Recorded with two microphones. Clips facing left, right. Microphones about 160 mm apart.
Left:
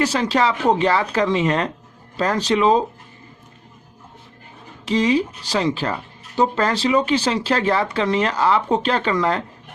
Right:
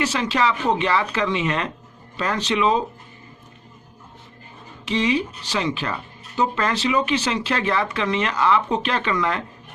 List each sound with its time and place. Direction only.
0.0 s speech: 35° left (ahead or behind)
4.9 s speech: 40° left (ahead or behind)